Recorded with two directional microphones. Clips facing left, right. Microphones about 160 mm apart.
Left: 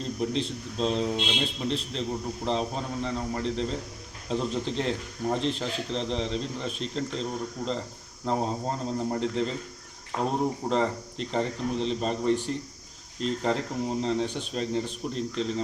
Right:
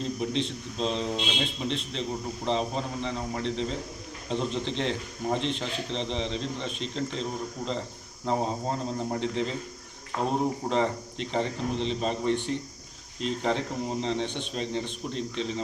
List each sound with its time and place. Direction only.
0.0 s a man's voice: centre (ahead or behind)
10.1 s speech: 30° left (ahead or behind)
10.6 s a man's voice: 5° left (ahead or behind)
13.4 s a man's voice: centre (ahead or behind)